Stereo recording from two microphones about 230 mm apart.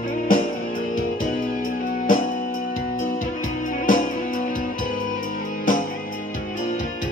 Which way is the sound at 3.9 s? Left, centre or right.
Left.